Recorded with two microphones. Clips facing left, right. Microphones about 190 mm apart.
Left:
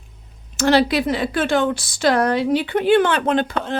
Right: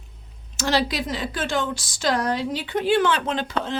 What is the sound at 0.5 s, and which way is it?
Speech, 60° left (ahead or behind).